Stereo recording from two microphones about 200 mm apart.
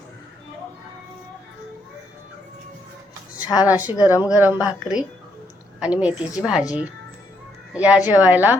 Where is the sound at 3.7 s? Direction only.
5° right (ahead or behind).